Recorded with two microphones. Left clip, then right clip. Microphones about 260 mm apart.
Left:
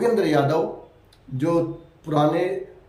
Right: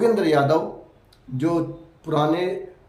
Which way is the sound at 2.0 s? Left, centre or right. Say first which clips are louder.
Left 1 dB; centre.